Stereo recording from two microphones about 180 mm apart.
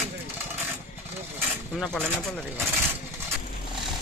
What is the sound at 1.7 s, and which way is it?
Speech, 5° left (ahead or behind).